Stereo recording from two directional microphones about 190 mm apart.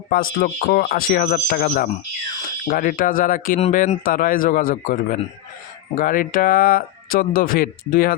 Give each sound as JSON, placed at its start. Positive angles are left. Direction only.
{"t": 0.1, "sound": "speech", "side_deg": 50}